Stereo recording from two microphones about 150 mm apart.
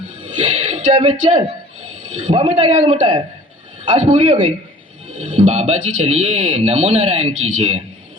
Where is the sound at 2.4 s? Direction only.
45° right (ahead or behind).